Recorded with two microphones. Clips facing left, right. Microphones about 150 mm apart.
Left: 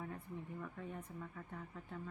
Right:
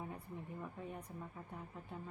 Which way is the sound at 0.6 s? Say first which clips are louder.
Even; 15° right (ahead or behind).